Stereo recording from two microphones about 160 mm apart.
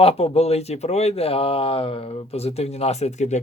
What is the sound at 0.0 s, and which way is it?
Speech, 40° left (ahead or behind).